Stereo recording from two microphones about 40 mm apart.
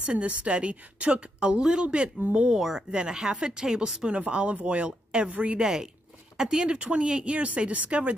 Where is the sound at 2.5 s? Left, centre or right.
Centre.